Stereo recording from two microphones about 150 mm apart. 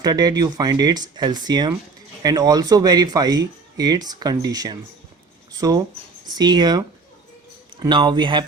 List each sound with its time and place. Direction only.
0.0 s speech: 25° right (ahead or behind)